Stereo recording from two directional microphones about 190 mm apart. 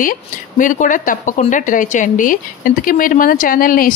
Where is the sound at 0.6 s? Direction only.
45° left (ahead or behind).